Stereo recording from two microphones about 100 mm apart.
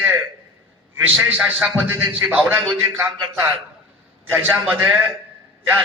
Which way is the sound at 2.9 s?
30° right (ahead or behind).